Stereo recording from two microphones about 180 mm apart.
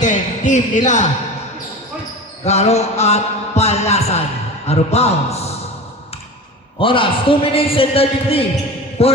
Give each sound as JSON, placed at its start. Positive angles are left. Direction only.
{"t": 0.0, "sound": "speech", "side_deg": 45}
{"t": 2.4, "sound": "a man's voice", "side_deg": 35}
{"t": 6.7, "sound": "a man's voice", "side_deg": 30}